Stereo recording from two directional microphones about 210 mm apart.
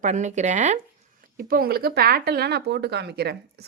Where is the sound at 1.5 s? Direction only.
45° right (ahead or behind).